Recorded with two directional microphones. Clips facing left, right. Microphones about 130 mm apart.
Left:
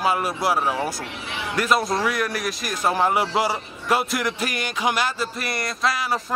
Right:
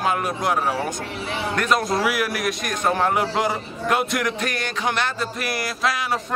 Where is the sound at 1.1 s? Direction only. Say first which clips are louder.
Right 4 dB; 40° right (ahead or behind).